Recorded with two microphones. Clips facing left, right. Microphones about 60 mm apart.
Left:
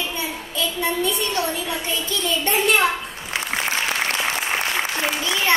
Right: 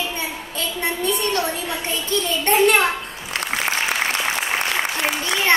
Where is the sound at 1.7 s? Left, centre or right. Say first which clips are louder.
Right 1 dB; right.